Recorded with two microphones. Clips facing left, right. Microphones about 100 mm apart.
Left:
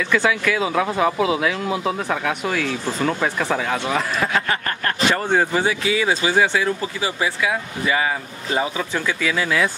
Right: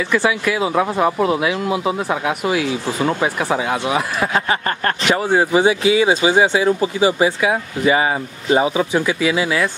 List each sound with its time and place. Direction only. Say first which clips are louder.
0.1 s speech: right 1 dB; 5° right (ahead or behind)
5.6 s speech: right 6 dB; 20° right (ahead or behind)